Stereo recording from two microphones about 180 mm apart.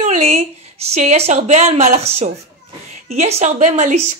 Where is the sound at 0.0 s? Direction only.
40° right (ahead or behind).